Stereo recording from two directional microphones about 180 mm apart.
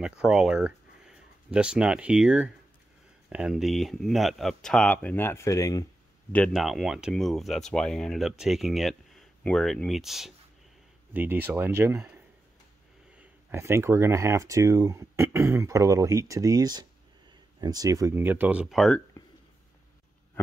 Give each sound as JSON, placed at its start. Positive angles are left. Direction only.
{"t": 0.2, "sound": "speech", "side_deg": -5}
{"t": 6.3, "sound": "speech", "side_deg": 0}
{"t": 13.5, "sound": "speech", "side_deg": -15}